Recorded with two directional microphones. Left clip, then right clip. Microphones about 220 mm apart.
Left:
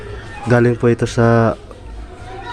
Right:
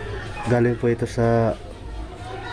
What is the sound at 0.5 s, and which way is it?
Speech, 20° left (ahead or behind).